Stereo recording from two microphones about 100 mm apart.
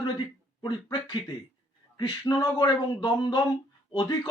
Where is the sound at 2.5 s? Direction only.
50° left (ahead or behind).